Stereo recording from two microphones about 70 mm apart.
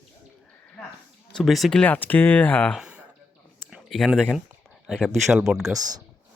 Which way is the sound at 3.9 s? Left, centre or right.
Centre.